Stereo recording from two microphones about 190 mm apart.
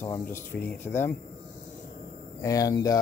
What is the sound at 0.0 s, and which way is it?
Speech, 10° left (ahead or behind).